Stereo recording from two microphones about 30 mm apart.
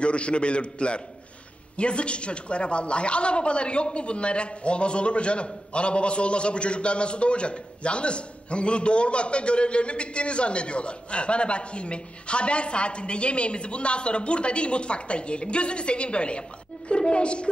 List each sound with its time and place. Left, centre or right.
0.0 s a woman's voice: left